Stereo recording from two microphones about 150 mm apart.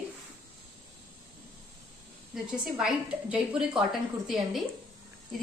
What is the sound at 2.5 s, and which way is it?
A woman's voice, 5° right (ahead or behind).